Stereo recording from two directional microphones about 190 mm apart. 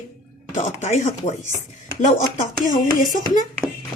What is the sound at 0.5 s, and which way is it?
A woman's voice, 40° left (ahead or behind).